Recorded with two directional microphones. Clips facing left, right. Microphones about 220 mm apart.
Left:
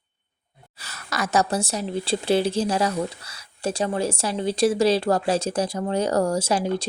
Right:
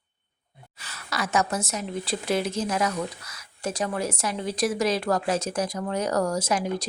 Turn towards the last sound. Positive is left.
turn(degrees=30)  # may be behind; listen again after turning